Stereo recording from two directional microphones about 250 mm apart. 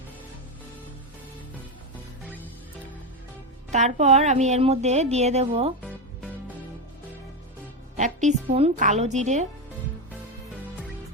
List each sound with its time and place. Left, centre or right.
3.7 s a woman's voice: right
7.9 s a woman's voice: right